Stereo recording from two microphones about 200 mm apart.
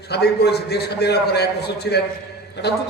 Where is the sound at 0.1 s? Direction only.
55° left (ahead or behind).